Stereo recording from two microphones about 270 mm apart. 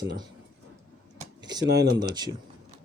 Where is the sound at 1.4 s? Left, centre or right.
Centre.